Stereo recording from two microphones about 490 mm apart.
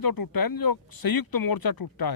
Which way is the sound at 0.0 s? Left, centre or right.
Left.